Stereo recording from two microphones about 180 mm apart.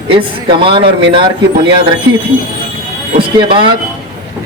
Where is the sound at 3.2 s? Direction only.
30° right (ahead or behind).